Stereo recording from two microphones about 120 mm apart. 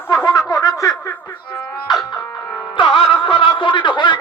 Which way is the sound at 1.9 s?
35° left (ahead or behind).